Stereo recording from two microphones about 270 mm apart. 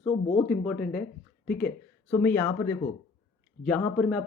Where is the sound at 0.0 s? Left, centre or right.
Left.